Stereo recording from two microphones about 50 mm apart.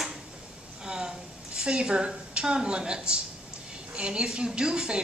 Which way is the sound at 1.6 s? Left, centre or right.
Centre.